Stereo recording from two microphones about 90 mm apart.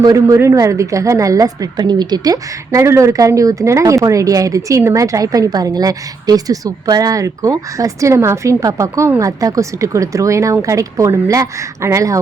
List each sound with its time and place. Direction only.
0.0 s a woman's voice: 40° right (ahead or behind)